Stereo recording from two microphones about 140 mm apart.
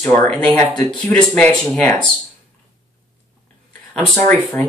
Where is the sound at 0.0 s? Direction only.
20° left (ahead or behind).